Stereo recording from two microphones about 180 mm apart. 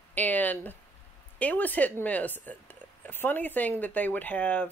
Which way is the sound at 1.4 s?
10° left (ahead or behind).